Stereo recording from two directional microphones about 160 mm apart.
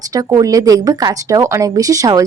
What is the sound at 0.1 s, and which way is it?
Speech, 25° right (ahead or behind).